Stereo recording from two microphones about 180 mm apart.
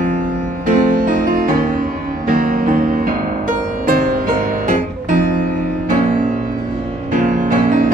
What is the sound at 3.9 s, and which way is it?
Music, 50° right (ahead or behind).